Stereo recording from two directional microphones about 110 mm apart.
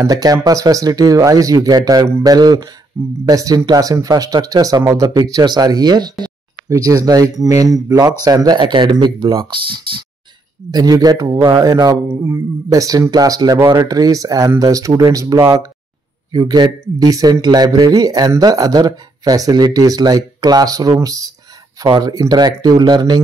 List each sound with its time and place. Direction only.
0.0 s speech: 35° right (ahead or behind)
2.9 s speech: 25° right (ahead or behind); by 10.0 s 50° right (ahead or behind)
10.7 s speech: 35° right (ahead or behind)
12.1 s speech: 20° right (ahead or behind); by 23.2 s 40° right (ahead or behind)